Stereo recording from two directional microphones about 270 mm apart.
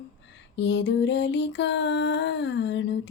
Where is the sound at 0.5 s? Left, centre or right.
Left.